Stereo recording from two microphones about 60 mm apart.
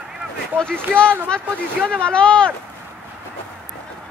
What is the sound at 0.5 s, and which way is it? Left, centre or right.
Speech, centre.